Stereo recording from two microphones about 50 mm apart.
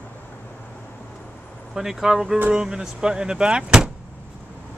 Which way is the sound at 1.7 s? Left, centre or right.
Centre.